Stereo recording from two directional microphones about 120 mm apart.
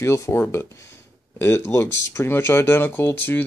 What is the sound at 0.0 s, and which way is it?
Speech, 20° left (ahead or behind).